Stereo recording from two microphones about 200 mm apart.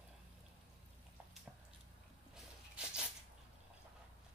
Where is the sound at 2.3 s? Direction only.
5° right (ahead or behind).